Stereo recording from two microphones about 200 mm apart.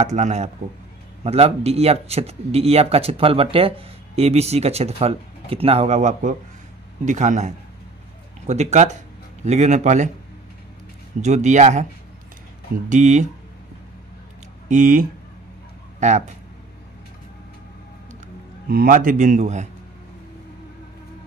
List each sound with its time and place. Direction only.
0.0 s speech: 35° right (ahead or behind)
11.1 s speech: 35° right (ahead or behind)
12.9 s speech: 35° right (ahead or behind)
14.7 s speech: 40° right (ahead or behind)
18.7 s speech: 45° right (ahead or behind)